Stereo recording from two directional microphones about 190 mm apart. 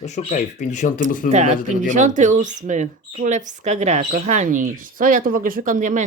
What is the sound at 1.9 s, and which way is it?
Speech, 40° right (ahead or behind).